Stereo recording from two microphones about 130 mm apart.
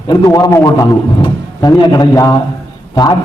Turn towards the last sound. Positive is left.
turn(degrees=30)  # may be behind; listen again after turning